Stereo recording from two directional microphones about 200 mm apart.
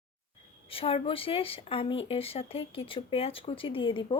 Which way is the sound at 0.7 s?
25° left (ahead or behind).